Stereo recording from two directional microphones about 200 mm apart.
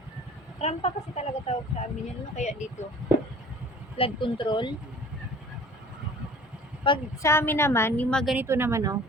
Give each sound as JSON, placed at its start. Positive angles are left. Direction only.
{"t": 0.6, "sound": "a woman's voice", "side_deg": 30}
{"t": 3.9, "sound": "speech", "side_deg": 25}
{"t": 6.8, "sound": "a woman's voice", "side_deg": 20}
{"t": 8.4, "sound": "a woman's voice", "side_deg": -10}